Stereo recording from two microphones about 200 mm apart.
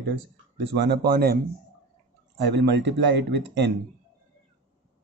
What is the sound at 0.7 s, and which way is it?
Speech, 55° right (ahead or behind).